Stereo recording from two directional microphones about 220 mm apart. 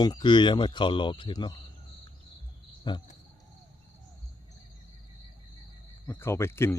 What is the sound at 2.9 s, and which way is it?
Speech, 20° left (ahead or behind).